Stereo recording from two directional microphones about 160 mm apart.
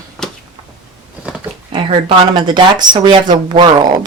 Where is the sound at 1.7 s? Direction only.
35° right (ahead or behind).